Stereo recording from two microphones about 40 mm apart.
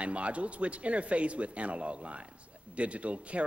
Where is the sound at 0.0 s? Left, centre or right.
Right.